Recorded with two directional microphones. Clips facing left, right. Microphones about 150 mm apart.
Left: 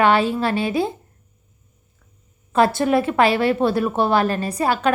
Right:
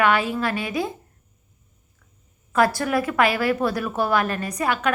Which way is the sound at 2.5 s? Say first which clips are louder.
Left 4 dB; 25° left (ahead or behind).